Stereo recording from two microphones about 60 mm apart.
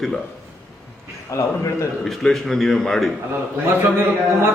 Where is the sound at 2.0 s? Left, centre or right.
Centre.